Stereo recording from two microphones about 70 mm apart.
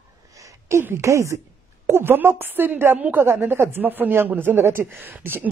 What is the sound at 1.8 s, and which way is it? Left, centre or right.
Speech, right.